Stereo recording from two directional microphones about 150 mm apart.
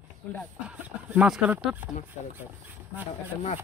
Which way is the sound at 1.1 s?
5° right (ahead or behind).